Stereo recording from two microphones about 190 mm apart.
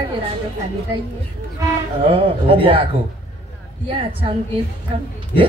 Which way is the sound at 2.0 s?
30° right (ahead or behind).